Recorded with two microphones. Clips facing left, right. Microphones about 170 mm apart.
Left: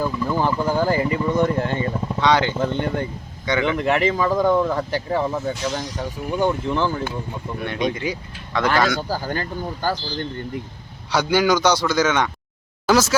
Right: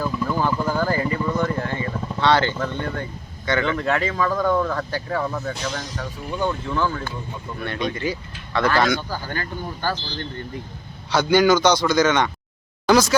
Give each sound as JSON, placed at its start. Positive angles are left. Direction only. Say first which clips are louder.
{"t": 0.0, "sound": "vehicle", "louder": "left 1 dB", "side_deg": 15}
{"t": 2.3, "sound": "a man's voice", "louder": "left 2 dB", "side_deg": 15}
{"t": 9.0, "sound": "speech", "louder": "left 4 dB", "side_deg": 40}
{"t": 11.1, "sound": "a man's voice", "louder": "right 2 dB", "side_deg": 10}